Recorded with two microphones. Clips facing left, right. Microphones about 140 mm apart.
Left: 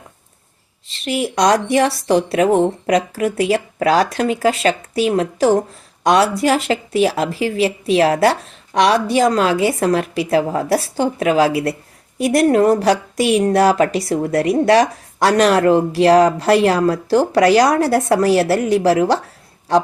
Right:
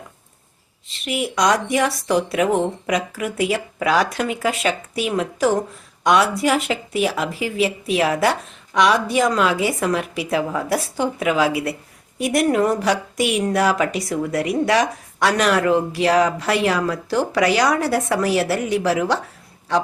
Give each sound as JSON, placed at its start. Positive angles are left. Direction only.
{"t": 1.0, "sound": "a woman's voice", "side_deg": 35}